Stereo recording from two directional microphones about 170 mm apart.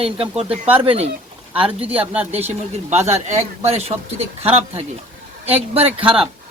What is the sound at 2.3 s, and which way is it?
Speech, 40° right (ahead or behind).